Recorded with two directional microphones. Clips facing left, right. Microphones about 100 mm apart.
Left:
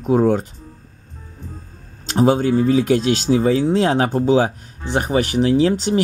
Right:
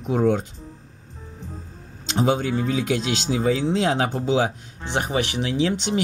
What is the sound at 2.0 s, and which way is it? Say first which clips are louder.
Speech: left 6 dB; 40° left (ahead or behind).